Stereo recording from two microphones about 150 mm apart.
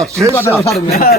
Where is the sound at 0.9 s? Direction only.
90° left.